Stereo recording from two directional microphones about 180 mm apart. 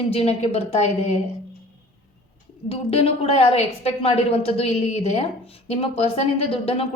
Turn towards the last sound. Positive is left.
turn(degrees=30)  # may be behind; listen again after turning